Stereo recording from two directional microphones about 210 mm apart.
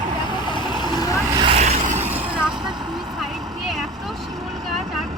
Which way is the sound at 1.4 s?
30° right (ahead or behind).